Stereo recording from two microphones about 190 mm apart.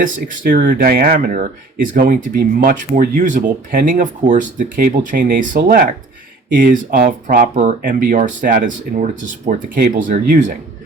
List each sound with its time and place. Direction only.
0.0 s speech: 45° right (ahead or behind)